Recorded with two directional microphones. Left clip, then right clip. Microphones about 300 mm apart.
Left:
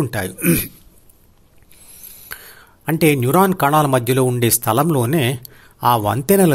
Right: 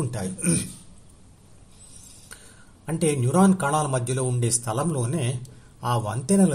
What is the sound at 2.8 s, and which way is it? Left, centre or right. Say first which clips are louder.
Speech: left 9 dB; left.